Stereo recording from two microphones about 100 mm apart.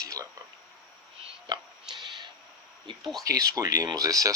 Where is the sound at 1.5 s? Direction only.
45° right (ahead or behind).